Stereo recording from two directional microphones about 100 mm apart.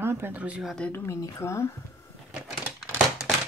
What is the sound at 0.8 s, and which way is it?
Speech, 20° left (ahead or behind).